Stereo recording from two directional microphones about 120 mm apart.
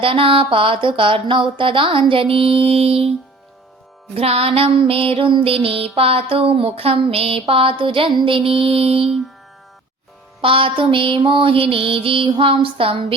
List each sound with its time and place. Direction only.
0.0 s speech: 50° right (ahead or behind)
10.4 s speech: 45° right (ahead or behind)